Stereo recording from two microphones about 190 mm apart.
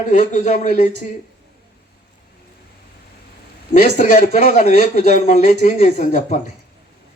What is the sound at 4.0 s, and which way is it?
A man's voice, 35° left (ahead or behind).